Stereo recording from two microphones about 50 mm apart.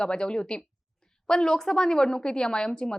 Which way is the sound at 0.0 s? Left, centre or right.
Centre.